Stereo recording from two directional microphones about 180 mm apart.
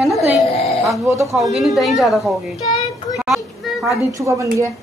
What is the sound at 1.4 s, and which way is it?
Speech, centre (ahead or behind).